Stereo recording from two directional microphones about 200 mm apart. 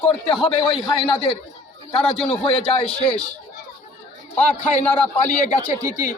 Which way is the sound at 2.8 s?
5° left (ahead or behind).